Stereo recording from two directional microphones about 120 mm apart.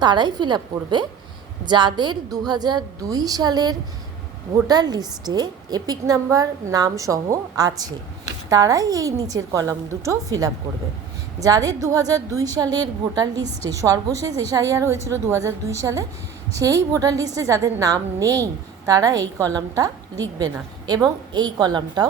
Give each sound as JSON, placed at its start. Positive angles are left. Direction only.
{"t": 0.0, "sound": "a woman's voice", "side_deg": -40}